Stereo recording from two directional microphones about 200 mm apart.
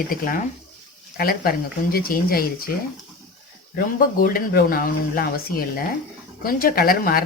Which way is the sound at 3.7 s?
45° left (ahead or behind).